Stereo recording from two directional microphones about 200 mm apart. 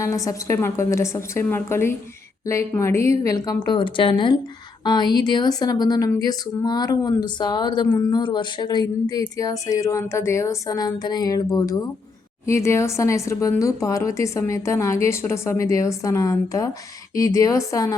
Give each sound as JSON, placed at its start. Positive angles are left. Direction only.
{"t": 0.0, "sound": "speech", "side_deg": 15}